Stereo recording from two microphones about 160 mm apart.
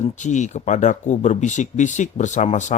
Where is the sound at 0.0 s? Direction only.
50° left (ahead or behind).